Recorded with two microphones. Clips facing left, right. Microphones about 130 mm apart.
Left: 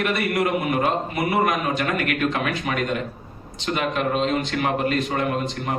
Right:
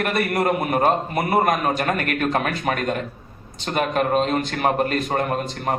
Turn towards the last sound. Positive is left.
turn(degrees=-45)  # may be behind; listen again after turning